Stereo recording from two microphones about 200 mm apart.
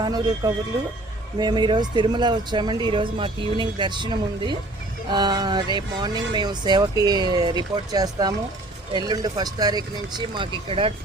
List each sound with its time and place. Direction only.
0.0 s speech: 20° right (ahead or behind)